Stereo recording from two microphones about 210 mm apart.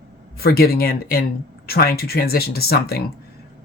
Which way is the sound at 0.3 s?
45° left (ahead or behind).